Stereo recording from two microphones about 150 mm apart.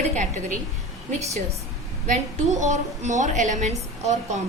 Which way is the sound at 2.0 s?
55° right (ahead or behind).